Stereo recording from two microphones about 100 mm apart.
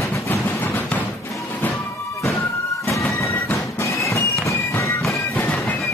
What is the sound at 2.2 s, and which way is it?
Music, 25° left (ahead or behind).